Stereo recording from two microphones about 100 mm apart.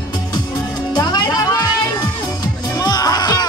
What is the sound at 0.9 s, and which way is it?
Music, 45° left (ahead or behind).